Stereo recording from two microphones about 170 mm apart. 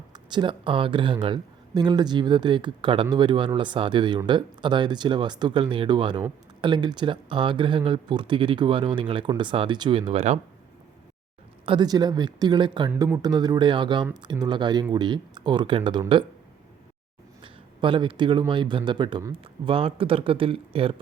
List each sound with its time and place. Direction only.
0.1 s speech: 25° right (ahead or behind)
11.6 s speech: 30° right (ahead or behind)
12.9 s speech: 10° right (ahead or behind)
13.2 s speech: 25° right (ahead or behind)
17.4 s speech: 30° right (ahead or behind)